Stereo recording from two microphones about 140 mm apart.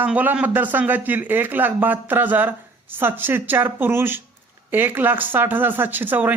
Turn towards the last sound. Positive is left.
turn(degrees=-15)  # may be behind; listen again after turning